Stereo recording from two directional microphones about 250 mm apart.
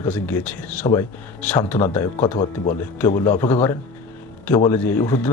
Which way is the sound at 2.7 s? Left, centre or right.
Centre.